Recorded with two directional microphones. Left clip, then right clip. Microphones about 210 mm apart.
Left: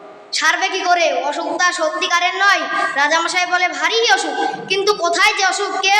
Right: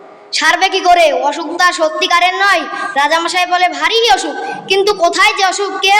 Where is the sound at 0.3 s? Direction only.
30° right (ahead or behind).